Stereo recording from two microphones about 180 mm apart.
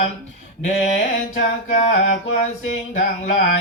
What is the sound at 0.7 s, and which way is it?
Mantra, 40° left (ahead or behind).